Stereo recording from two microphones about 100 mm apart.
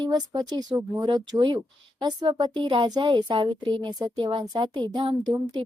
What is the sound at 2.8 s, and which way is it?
Speech, 40° right (ahead or behind).